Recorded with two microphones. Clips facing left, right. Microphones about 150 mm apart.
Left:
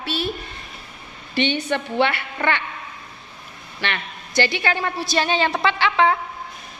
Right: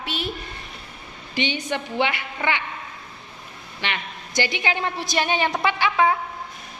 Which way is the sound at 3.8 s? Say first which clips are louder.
Left 2 dB; 15° right (ahead or behind).